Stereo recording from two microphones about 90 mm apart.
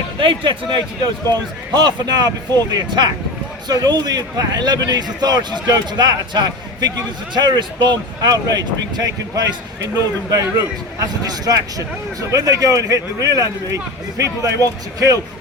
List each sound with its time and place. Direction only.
0.2 s speech: 65° right (ahead or behind)
1.7 s speech: 50° right (ahead or behind)